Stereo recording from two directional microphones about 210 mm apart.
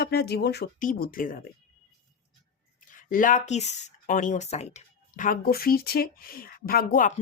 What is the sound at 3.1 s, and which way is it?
Speech, 40° left (ahead or behind).